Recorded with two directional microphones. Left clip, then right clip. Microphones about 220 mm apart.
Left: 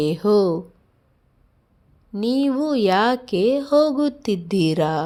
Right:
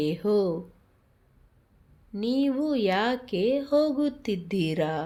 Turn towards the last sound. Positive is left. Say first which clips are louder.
# left 7 dB
turn(degrees=30)  # may be behind; listen again after turning